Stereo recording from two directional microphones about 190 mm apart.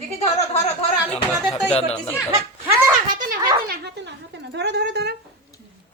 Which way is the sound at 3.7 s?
65° right (ahead or behind).